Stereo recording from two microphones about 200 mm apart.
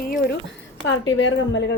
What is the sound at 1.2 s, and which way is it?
Speech, 65° left (ahead or behind).